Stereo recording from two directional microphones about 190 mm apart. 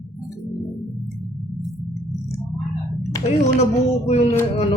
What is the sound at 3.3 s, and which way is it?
Speech, 35° left (ahead or behind).